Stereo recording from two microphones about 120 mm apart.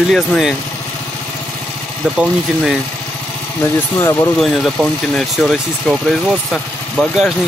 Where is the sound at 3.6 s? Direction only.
25° left (ahead or behind).